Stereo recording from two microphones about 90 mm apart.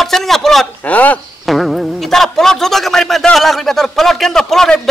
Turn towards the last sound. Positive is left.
turn(degrees=5)  # may be behind; listen again after turning